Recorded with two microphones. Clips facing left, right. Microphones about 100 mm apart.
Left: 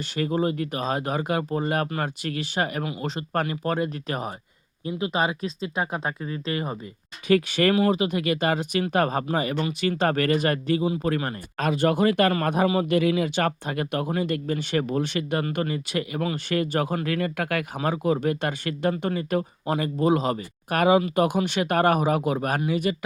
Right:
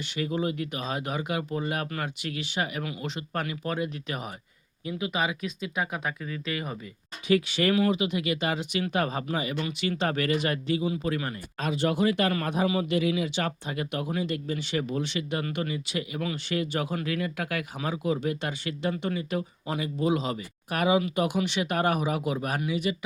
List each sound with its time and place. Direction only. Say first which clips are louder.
0.2 s speech: left 4 dB; 40° left (ahead or behind)
7.3 s a man's voice: left 4 dB; 50° left (ahead or behind)